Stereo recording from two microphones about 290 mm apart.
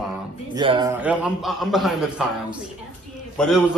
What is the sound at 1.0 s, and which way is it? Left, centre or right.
A man's voice, centre.